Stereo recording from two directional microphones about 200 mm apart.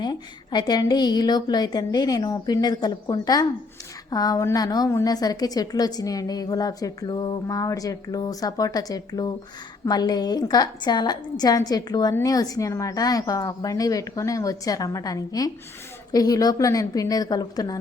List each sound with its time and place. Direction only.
0.0 s a woman's voice: 20° left (ahead or behind)